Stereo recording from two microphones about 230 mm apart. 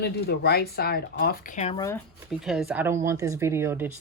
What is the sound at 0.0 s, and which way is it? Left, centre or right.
Speech, left.